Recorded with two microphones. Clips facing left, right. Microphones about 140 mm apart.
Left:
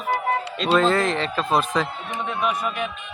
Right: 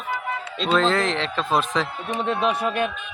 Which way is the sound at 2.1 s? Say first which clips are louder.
Right 3 dB; 70° right (ahead or behind).